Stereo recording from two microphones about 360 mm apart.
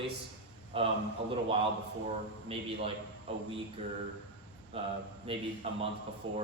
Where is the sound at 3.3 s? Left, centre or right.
Centre.